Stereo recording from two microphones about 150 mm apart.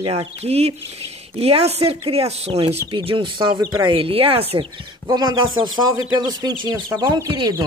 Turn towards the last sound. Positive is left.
turn(degrees=-30)  # may be behind; listen again after turning